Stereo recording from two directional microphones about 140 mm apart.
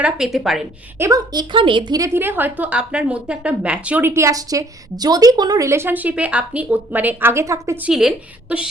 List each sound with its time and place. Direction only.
0.0 s a woman's voice: 5° right (ahead or behind)
0.9 s a woman's voice: 20° right (ahead or behind)
2.0 s a woman's voice: 15° right (ahead or behind)
7.9 s a woman's voice: 5° right (ahead or behind)